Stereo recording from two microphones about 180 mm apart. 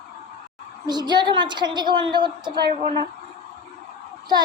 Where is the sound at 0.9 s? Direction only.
25° right (ahead or behind).